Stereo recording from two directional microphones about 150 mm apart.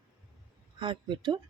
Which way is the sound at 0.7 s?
30° right (ahead or behind).